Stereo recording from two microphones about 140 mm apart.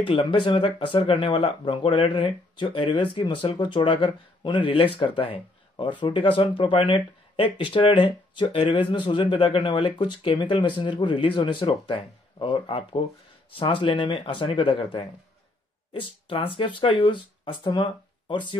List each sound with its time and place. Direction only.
0.0 s speech: 40° left (ahead or behind)